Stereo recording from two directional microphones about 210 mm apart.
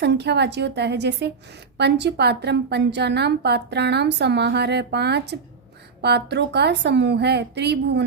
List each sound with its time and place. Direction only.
0.0 s a woman's voice: 55° right (ahead or behind)